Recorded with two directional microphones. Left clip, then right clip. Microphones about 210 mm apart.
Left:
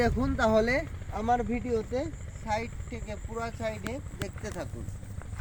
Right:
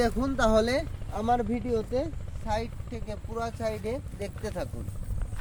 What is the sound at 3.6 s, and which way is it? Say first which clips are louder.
Speech: right 3 dB; 35° right (ahead or behind).